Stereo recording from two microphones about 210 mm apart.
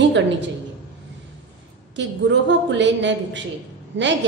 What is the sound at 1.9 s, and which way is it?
A woman's voice, 55° right (ahead or behind).